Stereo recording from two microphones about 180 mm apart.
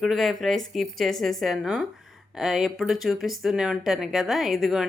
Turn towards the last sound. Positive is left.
turn(degrees=0)  # may be behind; listen again after turning